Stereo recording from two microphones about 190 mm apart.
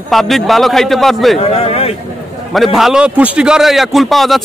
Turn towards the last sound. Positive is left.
turn(degrees=0)  # may be behind; listen again after turning